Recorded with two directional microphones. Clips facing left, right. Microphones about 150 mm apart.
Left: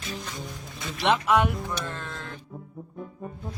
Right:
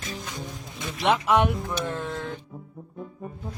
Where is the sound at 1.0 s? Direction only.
15° right (ahead or behind).